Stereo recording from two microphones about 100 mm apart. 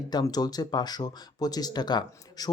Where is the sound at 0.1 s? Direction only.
40° left (ahead or behind).